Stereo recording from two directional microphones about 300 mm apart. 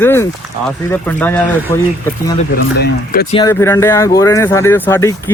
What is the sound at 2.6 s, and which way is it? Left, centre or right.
Speech, left.